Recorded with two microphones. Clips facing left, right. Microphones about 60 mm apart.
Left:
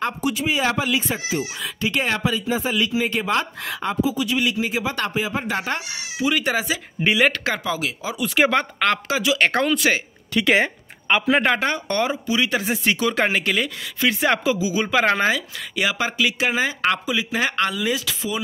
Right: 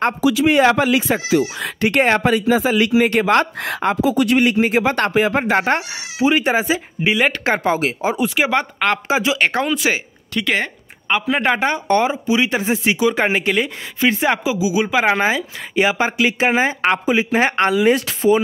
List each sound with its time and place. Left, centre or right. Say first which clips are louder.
0.3 s speech: right 10 dB; right
0.9 s speech: right 7 dB; right
2.4 s a man's voice: right 7 dB; right
2.7 s speech: right 7 dB; right
6.2 s speech: right 5 dB; right
7.0 s speech: even; centre
7.5 s speech: right 7 dB; right
8.4 s speech: right 1 dB; centre
9.0 s speech: right 3 dB; right
9.4 s speech: right 1 dB; centre
10.3 s speech: left 2 dB; centre
11.4 s speech: right 3 dB; centre
14.3 s speech: right 2 dB; centre
15.7 s speech: right 6 dB; right